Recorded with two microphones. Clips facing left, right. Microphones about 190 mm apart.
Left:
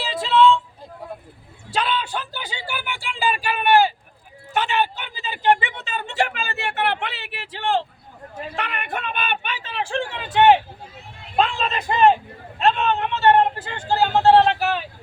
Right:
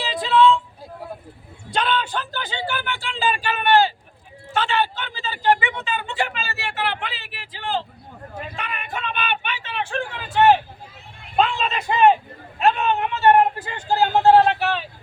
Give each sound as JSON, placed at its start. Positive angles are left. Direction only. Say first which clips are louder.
{"t": 0.0, "sound": "a sound", "louder": "even", "side_deg": 0}
{"t": 1.7, "sound": "a sound", "louder": "right 1 dB", "side_deg": 5}
{"t": 4.5, "sound": "a man's voice", "louder": "even", "side_deg": 15}
{"t": 5.5, "sound": "speech", "louder": "right 3 dB", "side_deg": 40}
{"t": 11.3, "sound": "a man's voice", "louder": "right 1 dB", "side_deg": 0}
{"t": 14.4, "sound": "vehicle", "louder": "even", "side_deg": 0}